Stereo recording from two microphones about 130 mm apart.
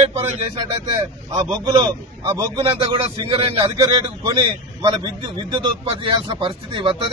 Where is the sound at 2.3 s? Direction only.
25° right (ahead or behind).